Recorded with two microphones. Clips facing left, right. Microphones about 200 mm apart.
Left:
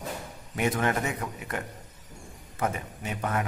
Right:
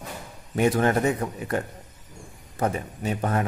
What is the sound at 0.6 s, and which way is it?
A man's voice, 35° right (ahead or behind).